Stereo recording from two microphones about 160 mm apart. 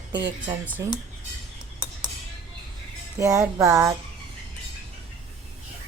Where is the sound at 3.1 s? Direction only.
20° right (ahead or behind).